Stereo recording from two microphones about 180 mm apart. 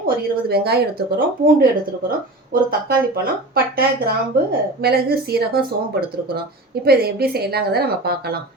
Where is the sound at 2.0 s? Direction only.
55° right (ahead or behind).